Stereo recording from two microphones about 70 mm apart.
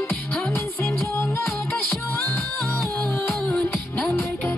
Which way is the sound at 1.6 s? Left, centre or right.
Left.